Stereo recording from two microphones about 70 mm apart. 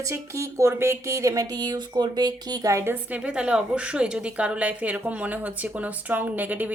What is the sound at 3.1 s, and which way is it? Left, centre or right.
A woman's voice, centre.